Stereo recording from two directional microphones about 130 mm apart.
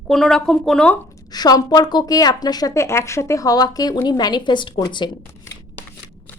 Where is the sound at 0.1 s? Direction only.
5° left (ahead or behind).